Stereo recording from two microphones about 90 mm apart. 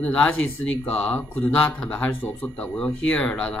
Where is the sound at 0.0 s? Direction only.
15° left (ahead or behind).